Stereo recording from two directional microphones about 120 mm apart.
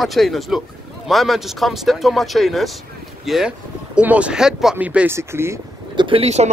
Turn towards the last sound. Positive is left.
turn(degrees=-65)  # may be behind; listen again after turning